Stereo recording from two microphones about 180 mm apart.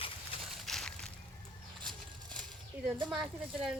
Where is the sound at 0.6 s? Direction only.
Centre (ahead or behind).